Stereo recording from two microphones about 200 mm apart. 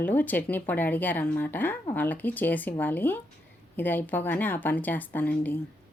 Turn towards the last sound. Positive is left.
turn(degrees=10)  # may be behind; listen again after turning